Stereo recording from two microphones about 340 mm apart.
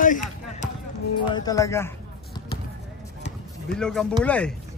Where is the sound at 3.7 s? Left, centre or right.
Centre.